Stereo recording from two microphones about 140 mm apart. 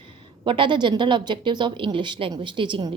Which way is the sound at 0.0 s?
35° right (ahead or behind).